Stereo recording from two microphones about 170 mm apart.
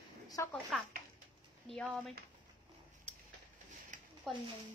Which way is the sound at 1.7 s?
5° left (ahead or behind).